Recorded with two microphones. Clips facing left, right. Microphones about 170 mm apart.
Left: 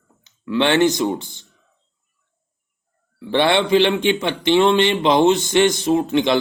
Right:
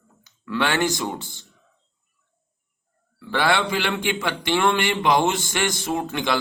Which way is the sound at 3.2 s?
25° left (ahead or behind).